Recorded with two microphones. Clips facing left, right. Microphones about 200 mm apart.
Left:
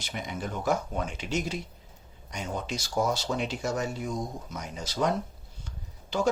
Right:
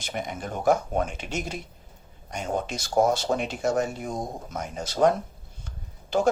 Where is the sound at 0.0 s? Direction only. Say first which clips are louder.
Right 3 dB; 50° right (ahead or behind).